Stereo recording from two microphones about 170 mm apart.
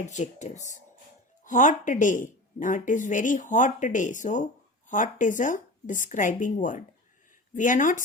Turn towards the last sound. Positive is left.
turn(degrees=50)  # may be behind; listen again after turning